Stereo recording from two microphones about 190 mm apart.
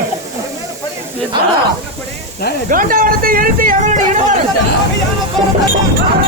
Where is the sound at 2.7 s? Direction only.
45° right (ahead or behind).